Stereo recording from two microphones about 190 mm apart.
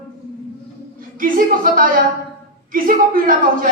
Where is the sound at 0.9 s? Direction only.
45° right (ahead or behind).